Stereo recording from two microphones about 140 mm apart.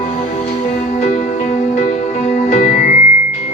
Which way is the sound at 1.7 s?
55° left (ahead or behind).